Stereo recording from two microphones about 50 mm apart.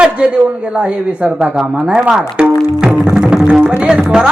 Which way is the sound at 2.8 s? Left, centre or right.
Centre.